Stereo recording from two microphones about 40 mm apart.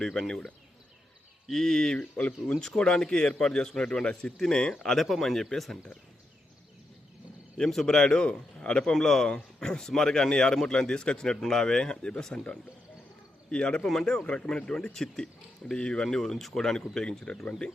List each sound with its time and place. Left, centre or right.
0.0 s speech: centre
2.1 s a man's voice: left
2.6 s a man's voice: centre
4.9 s speech: centre
7.9 s a man's voice: centre
8.9 s a man's voice: centre
14.6 s a man's voice: left
14.9 s speech: centre
15.7 s a man's voice: left